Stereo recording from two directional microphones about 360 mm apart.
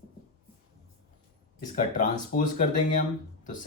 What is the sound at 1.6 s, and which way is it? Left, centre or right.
Speech, left.